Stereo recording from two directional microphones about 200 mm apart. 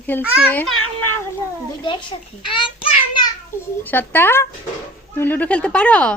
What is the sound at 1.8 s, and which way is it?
A child's voice, 25° left (ahead or behind).